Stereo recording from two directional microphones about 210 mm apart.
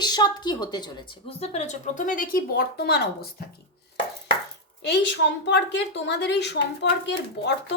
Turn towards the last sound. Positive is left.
turn(degrees=55)  # may be behind; listen again after turning